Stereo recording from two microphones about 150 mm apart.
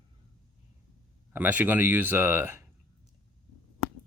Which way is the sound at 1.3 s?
10° right (ahead or behind).